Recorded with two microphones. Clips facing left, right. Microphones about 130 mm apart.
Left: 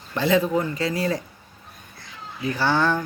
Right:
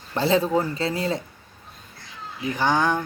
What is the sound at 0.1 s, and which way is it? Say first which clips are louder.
Speech: even; 30° right (ahead or behind).